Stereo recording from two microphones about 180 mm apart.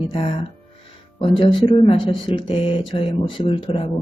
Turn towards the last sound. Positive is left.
turn(degrees=30)  # may be behind; listen again after turning